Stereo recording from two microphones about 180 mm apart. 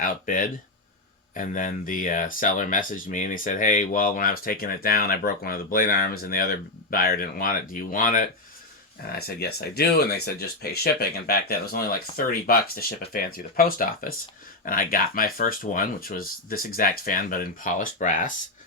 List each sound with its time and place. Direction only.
0.0 s speech: 50° left (ahead or behind)
9.1 s speech: 60° left (ahead or behind)